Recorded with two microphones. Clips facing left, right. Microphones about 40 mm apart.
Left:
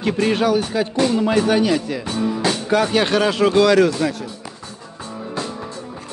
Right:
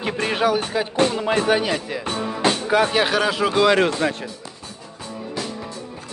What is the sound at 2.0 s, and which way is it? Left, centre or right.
Music, right.